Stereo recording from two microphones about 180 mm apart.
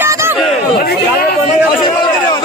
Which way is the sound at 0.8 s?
60° left (ahead or behind).